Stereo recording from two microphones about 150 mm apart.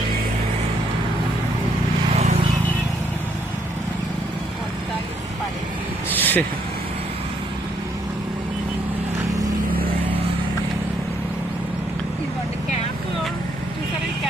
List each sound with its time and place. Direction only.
2.1 s vehicle: 45° right (ahead or behind)
6.1 s vehicle: 10° left (ahead or behind)